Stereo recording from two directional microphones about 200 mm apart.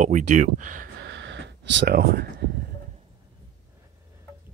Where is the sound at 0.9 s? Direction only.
65° right (ahead or behind).